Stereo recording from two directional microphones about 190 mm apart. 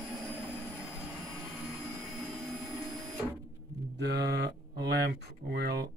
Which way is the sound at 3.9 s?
60° right (ahead or behind).